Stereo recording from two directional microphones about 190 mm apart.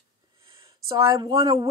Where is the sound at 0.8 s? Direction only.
25° right (ahead or behind).